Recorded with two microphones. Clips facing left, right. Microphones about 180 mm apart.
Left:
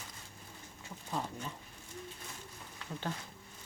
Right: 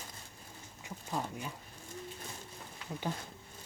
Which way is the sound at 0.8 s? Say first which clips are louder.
Right 1 dB; 10° right (ahead or behind).